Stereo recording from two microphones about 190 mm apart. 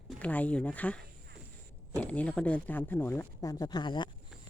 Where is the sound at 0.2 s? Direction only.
5° left (ahead or behind).